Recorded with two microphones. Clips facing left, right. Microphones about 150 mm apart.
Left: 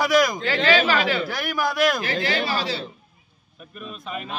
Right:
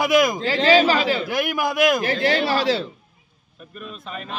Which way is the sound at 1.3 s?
20° right (ahead or behind).